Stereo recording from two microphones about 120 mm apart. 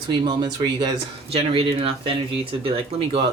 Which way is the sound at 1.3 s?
55° right (ahead or behind).